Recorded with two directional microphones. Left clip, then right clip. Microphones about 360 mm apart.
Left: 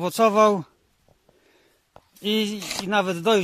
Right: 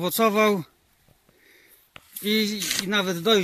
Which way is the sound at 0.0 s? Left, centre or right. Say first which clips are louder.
Left 3 dB; centre.